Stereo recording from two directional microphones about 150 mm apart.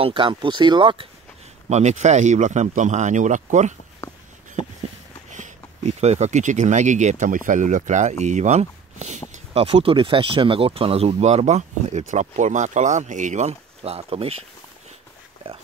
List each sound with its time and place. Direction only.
0.0 s speech: 35° right (ahead or behind)
1.7 s speech: 50° right (ahead or behind)
4.0 s a sound: 20° left (ahead or behind)
5.3 s speech: 50° right (ahead or behind)